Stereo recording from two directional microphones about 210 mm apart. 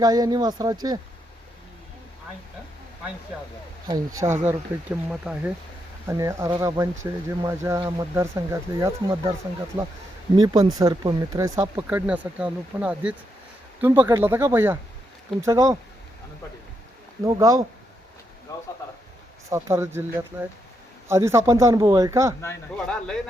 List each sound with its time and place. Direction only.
0.0 s speech: 20° right (ahead or behind)
3.8 s speech: 15° right (ahead or behind)
10.3 s speech: 20° right (ahead or behind)
17.2 s speech: 15° right (ahead or behind)
19.5 s speech: 15° right (ahead or behind)
22.4 s speech: 10° left (ahead or behind)